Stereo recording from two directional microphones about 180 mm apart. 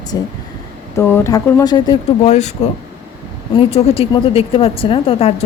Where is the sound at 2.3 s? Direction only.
40° left (ahead or behind).